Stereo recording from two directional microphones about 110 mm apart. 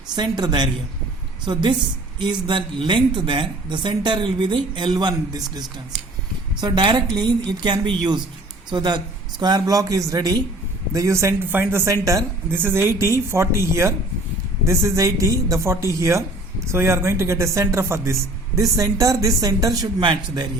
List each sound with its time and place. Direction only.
0.2 s speech: 40° right (ahead or behind)